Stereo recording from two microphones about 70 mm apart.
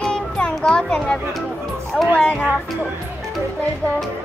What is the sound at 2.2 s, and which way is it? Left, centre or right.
Speech, centre.